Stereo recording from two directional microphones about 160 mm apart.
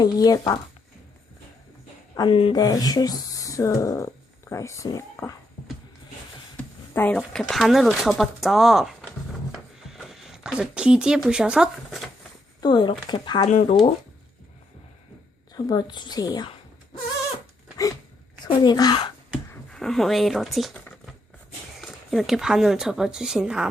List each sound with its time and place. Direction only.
0.0 s speech: 25° left (ahead or behind)
2.1 s speech: 30° left (ahead or behind)
6.6 s a sound: 10° left (ahead or behind)
7.2 s speech: centre (ahead or behind)
12.5 s speech: 25° left (ahead or behind)
13.5 s speech: 50° left (ahead or behind)
15.5 s speech: 25° left (ahead or behind)
18.4 s speech: 25° left (ahead or behind)
19.7 s speech: centre (ahead or behind)